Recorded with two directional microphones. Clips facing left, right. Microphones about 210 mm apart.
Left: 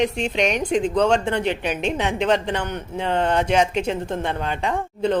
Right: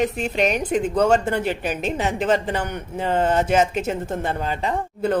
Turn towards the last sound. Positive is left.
turn(degrees=-5)  # may be behind; listen again after turning